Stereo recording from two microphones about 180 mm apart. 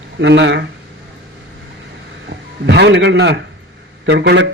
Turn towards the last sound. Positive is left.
turn(degrees=-70)  # may be behind; listen again after turning